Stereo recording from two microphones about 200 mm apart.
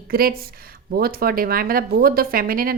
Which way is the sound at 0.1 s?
50° right (ahead or behind).